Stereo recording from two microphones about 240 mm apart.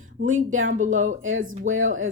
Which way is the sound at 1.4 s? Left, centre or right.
Right.